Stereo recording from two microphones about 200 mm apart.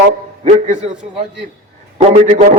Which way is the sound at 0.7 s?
35° right (ahead or behind).